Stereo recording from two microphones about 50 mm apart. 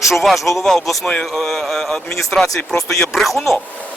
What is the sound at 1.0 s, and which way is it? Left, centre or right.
Speech, centre.